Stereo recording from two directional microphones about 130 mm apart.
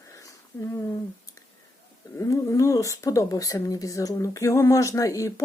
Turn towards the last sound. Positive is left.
turn(degrees=25)  # may be behind; listen again after turning